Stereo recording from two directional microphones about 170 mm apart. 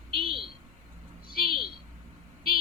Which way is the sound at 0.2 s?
30° right (ahead or behind).